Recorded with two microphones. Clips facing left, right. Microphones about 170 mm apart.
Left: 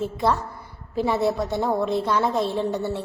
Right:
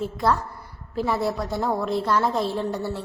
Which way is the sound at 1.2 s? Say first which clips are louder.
Left 2 dB; centre (ahead or behind).